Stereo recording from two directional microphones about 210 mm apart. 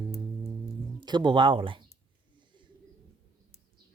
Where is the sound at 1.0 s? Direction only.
20° right (ahead or behind).